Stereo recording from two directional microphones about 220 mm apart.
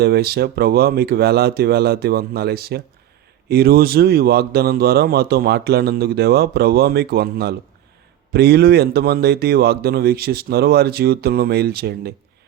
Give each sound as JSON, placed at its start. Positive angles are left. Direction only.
{"t": 0.0, "sound": "speech", "side_deg": -45}